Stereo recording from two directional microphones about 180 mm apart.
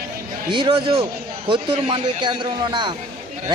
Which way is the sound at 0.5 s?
30° right (ahead or behind).